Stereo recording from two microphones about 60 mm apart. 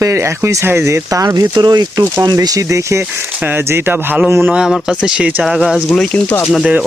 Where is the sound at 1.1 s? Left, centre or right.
Right.